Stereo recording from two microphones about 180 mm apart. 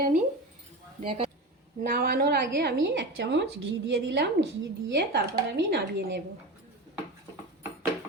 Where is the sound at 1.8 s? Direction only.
55° right (ahead or behind); by 4.4 s 80° right.